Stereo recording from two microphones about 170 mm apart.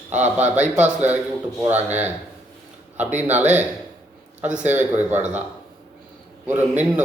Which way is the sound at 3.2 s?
10° right (ahead or behind).